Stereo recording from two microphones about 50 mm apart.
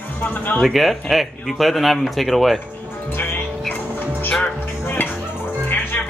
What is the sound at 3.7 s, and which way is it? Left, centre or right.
Music, left.